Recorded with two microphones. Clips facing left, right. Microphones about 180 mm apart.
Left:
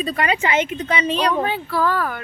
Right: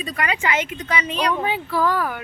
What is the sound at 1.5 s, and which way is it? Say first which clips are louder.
Speech: even; 15° right (ahead or behind).